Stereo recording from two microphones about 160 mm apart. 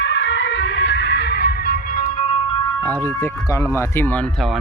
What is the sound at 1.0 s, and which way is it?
Music, 90° left.